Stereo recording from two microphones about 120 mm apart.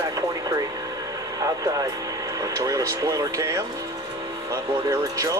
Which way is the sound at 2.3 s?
30° right (ahead or behind).